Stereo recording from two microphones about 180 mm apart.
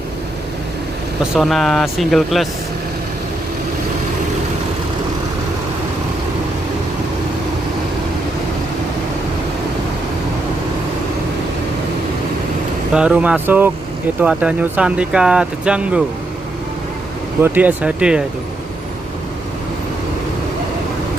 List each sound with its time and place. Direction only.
1.2 s speech: centre (ahead or behind)
12.9 s speech: 5° right (ahead or behind)
17.4 s speech: 10° right (ahead or behind)